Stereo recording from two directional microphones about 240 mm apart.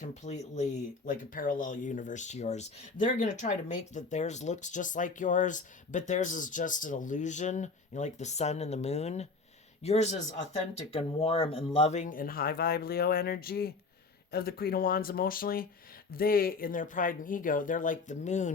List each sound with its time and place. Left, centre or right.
0.0 s a man's voice: left